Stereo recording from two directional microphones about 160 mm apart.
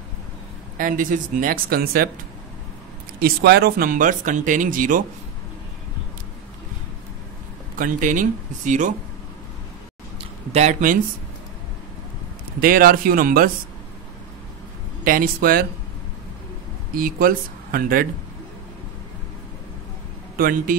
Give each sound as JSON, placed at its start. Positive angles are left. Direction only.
{"t": 0.7, "sound": "speech", "side_deg": -55}
{"t": 3.2, "sound": "speech", "side_deg": -75}
{"t": 7.7, "sound": "speech", "side_deg": -55}
{"t": 10.5, "sound": "speech", "side_deg": -45}
{"t": 12.5, "sound": "speech", "side_deg": -60}
{"t": 15.0, "sound": "speech", "side_deg": -65}
{"t": 16.9, "sound": "speech", "side_deg": -65}
{"t": 20.3, "sound": "speech", "side_deg": -60}